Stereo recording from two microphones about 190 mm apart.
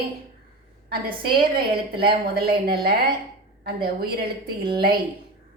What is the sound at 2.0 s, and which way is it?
Speech, 55° right (ahead or behind).